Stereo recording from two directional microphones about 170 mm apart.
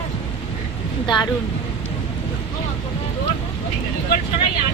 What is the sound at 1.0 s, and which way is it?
Speech, 25° left (ahead or behind).